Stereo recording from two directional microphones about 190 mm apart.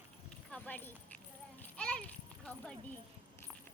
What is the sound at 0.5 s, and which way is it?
Speech, 10° left (ahead or behind).